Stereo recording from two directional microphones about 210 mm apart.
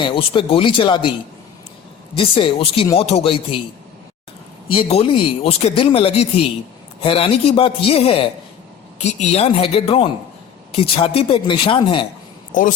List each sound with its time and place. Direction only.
0.0 s speech: 25° left (ahead or behind)
2.1 s speech: 25° left (ahead or behind)
4.7 s speech: 25° left (ahead or behind)